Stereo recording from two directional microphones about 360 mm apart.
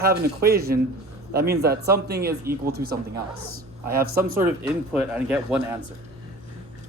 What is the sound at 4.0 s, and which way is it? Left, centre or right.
Speech, right.